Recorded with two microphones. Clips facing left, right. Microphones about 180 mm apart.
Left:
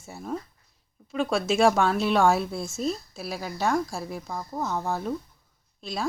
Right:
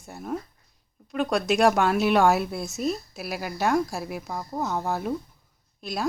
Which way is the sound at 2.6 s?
20° right (ahead or behind).